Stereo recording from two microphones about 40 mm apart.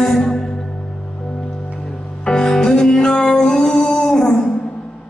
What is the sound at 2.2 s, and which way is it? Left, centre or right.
Music, centre.